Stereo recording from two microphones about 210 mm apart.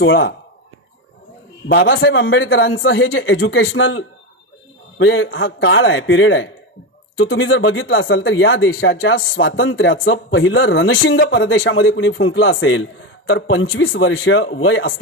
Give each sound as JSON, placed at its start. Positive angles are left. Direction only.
{"t": 0.0, "sound": "speech", "side_deg": 55}
{"t": 1.7, "sound": "speech", "side_deg": 55}